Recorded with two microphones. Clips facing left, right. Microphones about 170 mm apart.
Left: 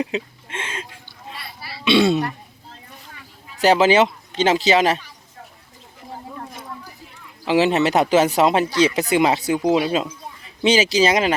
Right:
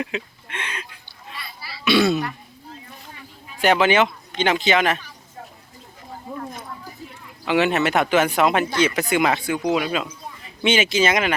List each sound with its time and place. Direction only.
0.0 s a sound: 25° left (ahead or behind)
1.8 s throat clearing: 25° left (ahead or behind)
3.6 s speech: 35° left (ahead or behind)
7.4 s speech: 30° left (ahead or behind)